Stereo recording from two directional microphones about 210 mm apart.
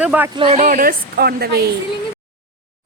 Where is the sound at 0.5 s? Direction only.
40° right (ahead or behind).